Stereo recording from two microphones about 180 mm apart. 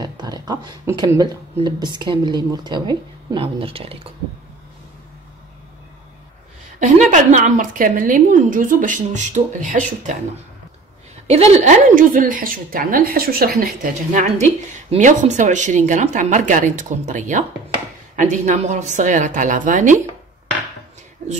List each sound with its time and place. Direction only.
0.0 s speech: 20° right (ahead or behind)
6.8 s a woman's voice: 40° right (ahead or behind)
11.2 s a woman's voice: 35° right (ahead or behind)
21.2 s speech: 40° right (ahead or behind)